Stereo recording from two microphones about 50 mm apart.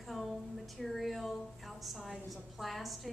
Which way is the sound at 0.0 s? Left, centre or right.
Centre.